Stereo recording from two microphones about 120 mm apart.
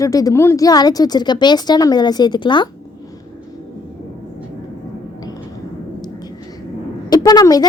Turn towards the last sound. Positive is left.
turn(degrees=30)  # may be behind; listen again after turning